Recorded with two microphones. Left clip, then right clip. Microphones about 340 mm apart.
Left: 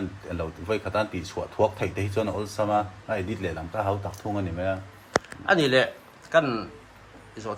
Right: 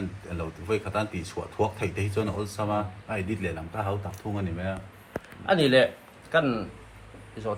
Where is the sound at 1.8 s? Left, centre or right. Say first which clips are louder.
Left 2 dB; left.